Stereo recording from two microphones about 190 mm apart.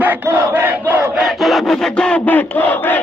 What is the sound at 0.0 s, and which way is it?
Crowd, 10° right (ahead or behind).